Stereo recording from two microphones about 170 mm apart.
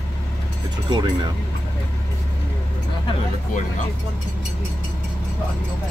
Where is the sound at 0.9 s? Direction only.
25° right (ahead or behind).